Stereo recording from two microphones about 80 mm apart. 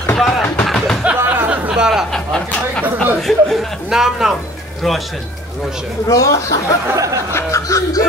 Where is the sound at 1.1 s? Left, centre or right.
Right.